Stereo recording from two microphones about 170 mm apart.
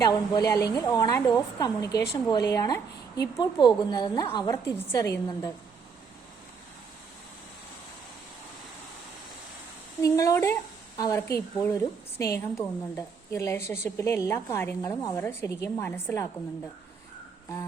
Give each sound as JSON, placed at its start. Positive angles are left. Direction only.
{"t": 0.0, "sound": "a woman's voice", "side_deg": 20}
{"t": 10.0, "sound": "a woman's voice", "side_deg": 20}